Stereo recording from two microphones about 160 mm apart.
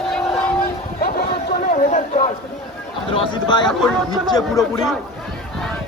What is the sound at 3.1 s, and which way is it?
Speech, 30° left (ahead or behind).